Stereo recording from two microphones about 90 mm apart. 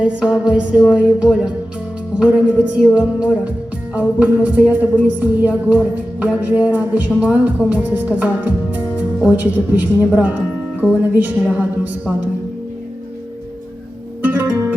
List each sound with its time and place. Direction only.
0.0 s music: 10° right (ahead or behind)
7.7 s speech: 15° right (ahead or behind)
10.2 s music: 15° right (ahead or behind)
14.2 s music: 15° right (ahead or behind)